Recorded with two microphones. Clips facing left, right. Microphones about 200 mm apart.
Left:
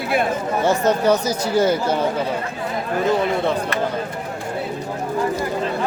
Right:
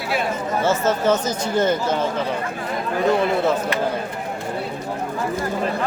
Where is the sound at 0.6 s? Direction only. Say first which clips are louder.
Left 2 dB; 15° left (ahead or behind).